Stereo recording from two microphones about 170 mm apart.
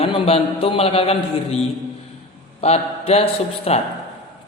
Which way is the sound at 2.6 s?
40° left (ahead or behind).